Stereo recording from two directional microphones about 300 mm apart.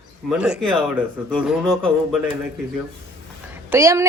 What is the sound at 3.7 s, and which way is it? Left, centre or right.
Speech, centre.